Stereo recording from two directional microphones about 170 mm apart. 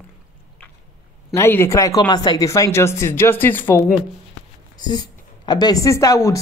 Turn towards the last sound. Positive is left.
turn(degrees=20)  # may be behind; listen again after turning